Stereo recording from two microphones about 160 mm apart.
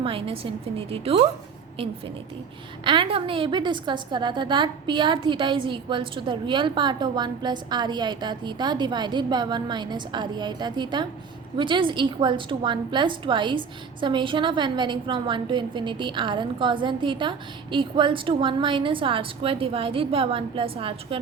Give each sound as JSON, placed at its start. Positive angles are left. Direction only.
{"t": 0.0, "sound": "a woman's voice", "side_deg": -35}